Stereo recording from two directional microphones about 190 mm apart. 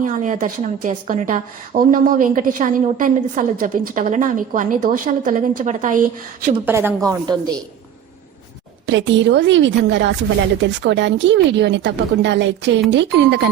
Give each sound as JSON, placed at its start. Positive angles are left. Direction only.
{"t": 0.0, "sound": "a woman's voice", "side_deg": -40}
{"t": 6.7, "sound": "a woman's voice", "side_deg": -10}
{"t": 8.9, "sound": "a woman's voice", "side_deg": -70}